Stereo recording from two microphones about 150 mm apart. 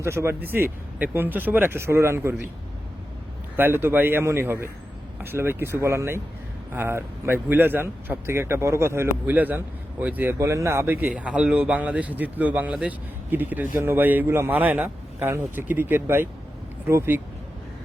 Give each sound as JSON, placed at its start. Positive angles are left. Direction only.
{"t": 0.0, "sound": "a man's voice", "side_deg": -20}
{"t": 3.6, "sound": "a man's voice", "side_deg": -15}